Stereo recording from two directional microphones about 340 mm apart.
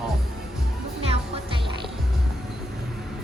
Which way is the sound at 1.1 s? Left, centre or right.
Centre.